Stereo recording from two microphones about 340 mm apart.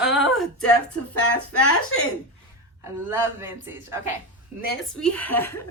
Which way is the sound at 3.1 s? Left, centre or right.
Centre.